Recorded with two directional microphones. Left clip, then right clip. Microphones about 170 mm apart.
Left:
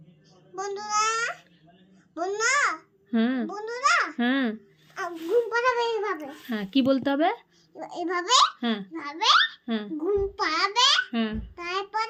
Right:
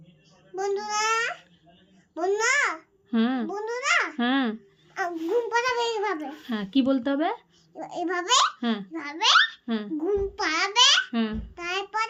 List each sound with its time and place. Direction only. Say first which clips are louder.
0.5 s babbling: even; 10° right (ahead or behind)
2.1 s a child's voice: right 1 dB; 5° right (ahead or behind)
4.9 s a child's voice: left 1 dB; 15° right (ahead or behind)
6.4 s speech: left 1 dB; centre (ahead or behind)
7.7 s a child's voice: even; 10° right (ahead or behind)
8.9 s a child's voice: right 1 dB; 10° right (ahead or behind)
9.6 s a child's voice: even; centre (ahead or behind)
10.0 s a child's voice: left 1 dB; 15° right (ahead or behind)
11.1 s a child's voice: even; centre (ahead or behind)
11.5 s child singing: right 1 dB; 15° right (ahead or behind)